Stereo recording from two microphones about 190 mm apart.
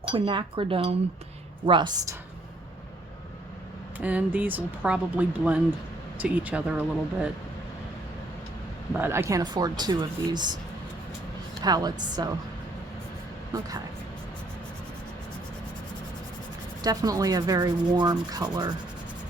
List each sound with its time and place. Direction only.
0.0 s rub: 25° right (ahead or behind)
3.9 s speech: 10° right (ahead or behind)
8.9 s rub: 10° right (ahead or behind)
11.6 s rub: 20° right (ahead or behind)
16.8 s rub: 20° right (ahead or behind)